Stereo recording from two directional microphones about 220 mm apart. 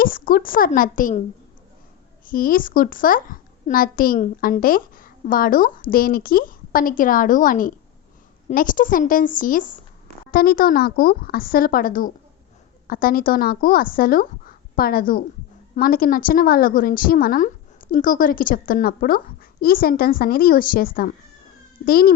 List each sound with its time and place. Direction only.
0.0 s a child's voice: 40° left (ahead or behind)
2.2 s a child's voice: 40° left (ahead or behind)